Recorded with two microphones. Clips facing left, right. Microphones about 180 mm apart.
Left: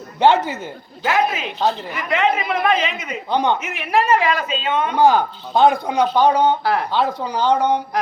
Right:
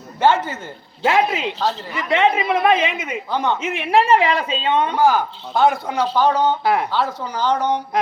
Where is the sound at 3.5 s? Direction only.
25° right (ahead or behind).